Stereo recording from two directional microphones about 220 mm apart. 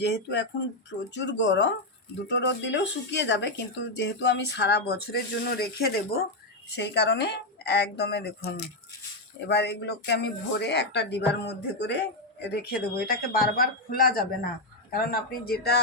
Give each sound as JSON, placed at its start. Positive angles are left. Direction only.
{"t": 0.0, "sound": "speech", "side_deg": 50}